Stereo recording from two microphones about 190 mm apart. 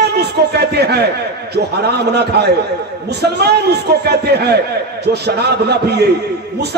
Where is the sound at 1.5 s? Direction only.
60° right (ahead or behind).